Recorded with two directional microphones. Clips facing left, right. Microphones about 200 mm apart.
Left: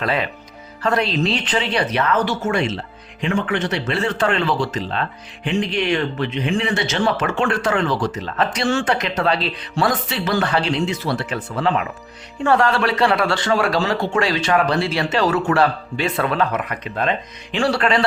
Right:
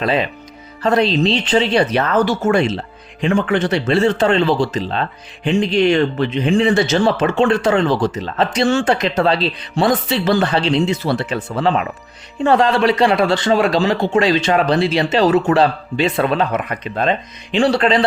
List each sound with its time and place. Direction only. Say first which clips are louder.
0.0 s speech: right 4 dB; 20° right (ahead or behind)
7.2 s speech: right 6 dB; 25° right (ahead or behind)